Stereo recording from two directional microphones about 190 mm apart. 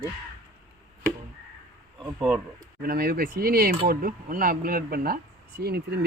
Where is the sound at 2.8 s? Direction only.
50° right (ahead or behind).